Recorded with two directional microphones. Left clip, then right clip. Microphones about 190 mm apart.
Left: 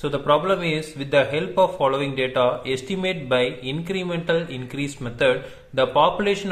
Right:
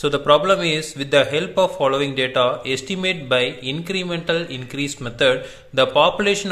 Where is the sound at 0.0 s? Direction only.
15° right (ahead or behind).